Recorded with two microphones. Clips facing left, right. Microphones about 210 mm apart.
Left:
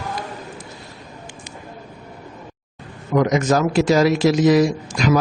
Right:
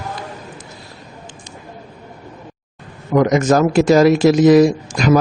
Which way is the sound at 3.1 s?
50° right (ahead or behind).